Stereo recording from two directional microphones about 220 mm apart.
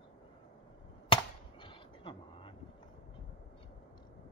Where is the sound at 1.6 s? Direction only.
25° left (ahead or behind).